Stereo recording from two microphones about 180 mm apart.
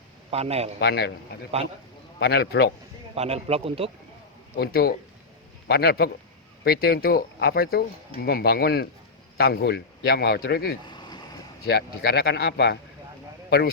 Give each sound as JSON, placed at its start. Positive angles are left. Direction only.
{"t": 0.3, "sound": "speech", "side_deg": -35}
{"t": 0.8, "sound": "speech", "side_deg": 65}
{"t": 3.2, "sound": "speech", "side_deg": -35}
{"t": 4.5, "sound": "speech", "side_deg": 60}
{"t": 10.8, "sound": "vehicle", "side_deg": 25}
{"t": 11.7, "sound": "speech", "side_deg": 60}